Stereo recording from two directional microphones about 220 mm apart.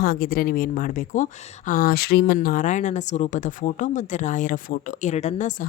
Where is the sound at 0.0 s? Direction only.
40° left (ahead or behind).